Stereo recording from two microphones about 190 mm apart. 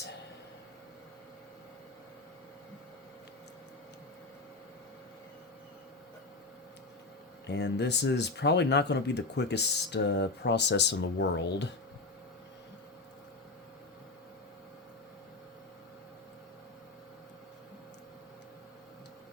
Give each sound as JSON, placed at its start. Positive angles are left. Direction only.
{"t": 7.4, "sound": "speech", "side_deg": 65}